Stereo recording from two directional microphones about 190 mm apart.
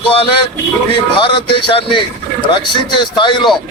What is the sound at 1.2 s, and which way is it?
Speech, 25° left (ahead or behind).